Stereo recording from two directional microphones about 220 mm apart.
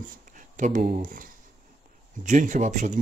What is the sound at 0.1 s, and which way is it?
Speech, 35° right (ahead or behind).